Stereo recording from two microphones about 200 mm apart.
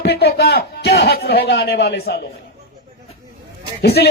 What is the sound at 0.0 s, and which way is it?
A man's voice, 55° left (ahead or behind).